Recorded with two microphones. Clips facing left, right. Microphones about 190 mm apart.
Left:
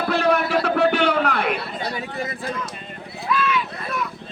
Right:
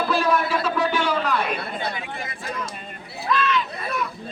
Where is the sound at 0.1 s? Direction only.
65° left (ahead or behind).